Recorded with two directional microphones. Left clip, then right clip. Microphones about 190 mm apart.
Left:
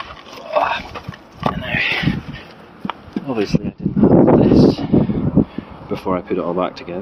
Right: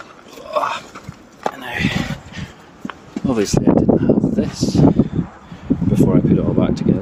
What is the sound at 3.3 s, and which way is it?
Speech, 40° right (ahead or behind).